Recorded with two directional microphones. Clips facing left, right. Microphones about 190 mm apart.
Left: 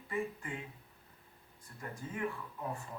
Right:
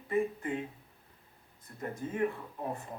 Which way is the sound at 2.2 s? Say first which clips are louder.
Right 5 dB; 35° right (ahead or behind).